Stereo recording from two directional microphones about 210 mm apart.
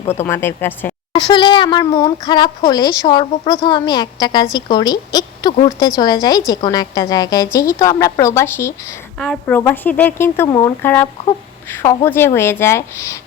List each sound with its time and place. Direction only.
0.3 s a woman's voice: 10° left (ahead or behind)
1.1 s a woman's voice: 20° left (ahead or behind)